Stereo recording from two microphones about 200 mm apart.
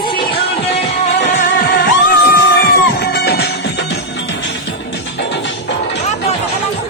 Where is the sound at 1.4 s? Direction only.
50° left (ahead or behind).